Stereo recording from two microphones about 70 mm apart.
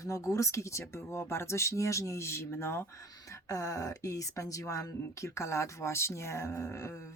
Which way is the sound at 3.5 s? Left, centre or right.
Left.